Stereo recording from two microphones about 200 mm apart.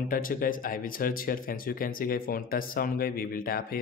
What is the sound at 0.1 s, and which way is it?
Speech, 45° left (ahead or behind).